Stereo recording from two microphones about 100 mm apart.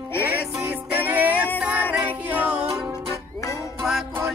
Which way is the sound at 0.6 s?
20° right (ahead or behind).